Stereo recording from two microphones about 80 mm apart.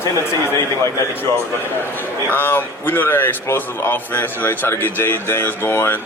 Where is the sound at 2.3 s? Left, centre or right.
Left.